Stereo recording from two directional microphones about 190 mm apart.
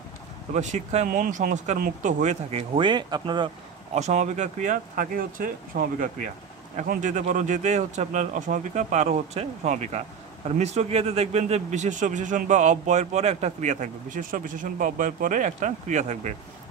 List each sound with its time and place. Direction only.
0.5 s a man's voice: 40° right (ahead or behind); by 3.4 s 25° right (ahead or behind)
3.9 s a man's voice: 35° right (ahead or behind)